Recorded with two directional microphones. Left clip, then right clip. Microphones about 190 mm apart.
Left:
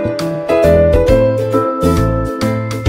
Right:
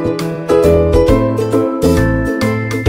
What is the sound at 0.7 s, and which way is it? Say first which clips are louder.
Music: left 1 dB; centre (ahead or behind).